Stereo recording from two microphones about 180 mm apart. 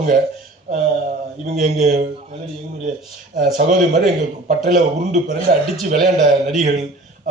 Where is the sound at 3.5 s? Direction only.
50° right (ahead or behind).